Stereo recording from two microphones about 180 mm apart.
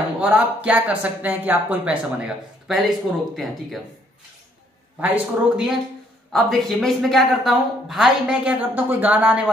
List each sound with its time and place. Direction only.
0.2 s a woman's voice: 5° right (ahead or behind)
5.0 s a woman's voice: 5° right (ahead or behind)